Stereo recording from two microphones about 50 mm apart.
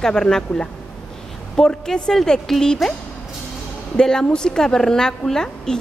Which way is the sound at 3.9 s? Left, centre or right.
Centre.